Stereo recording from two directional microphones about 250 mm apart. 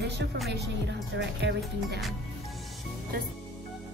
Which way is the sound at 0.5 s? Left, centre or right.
Right.